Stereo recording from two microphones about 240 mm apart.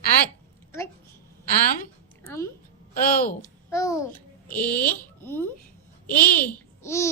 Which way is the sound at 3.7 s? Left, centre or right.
Centre.